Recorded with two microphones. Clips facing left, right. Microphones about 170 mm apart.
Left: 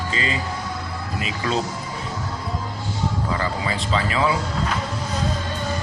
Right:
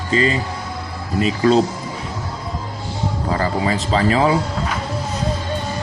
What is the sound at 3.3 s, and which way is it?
Speech, 40° right (ahead or behind).